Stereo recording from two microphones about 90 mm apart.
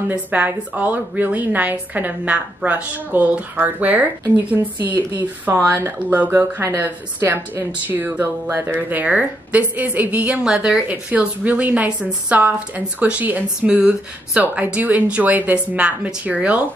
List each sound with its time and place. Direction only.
0.1 s a woman's voice: 20° right (ahead or behind)
5.9 s a woman's voice: 20° right (ahead or behind)